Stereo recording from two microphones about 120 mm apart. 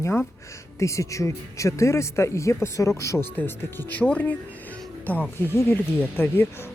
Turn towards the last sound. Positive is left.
turn(degrees=15)  # may be behind; listen again after turning